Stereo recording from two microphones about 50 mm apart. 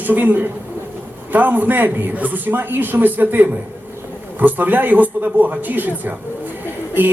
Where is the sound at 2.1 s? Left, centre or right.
Right.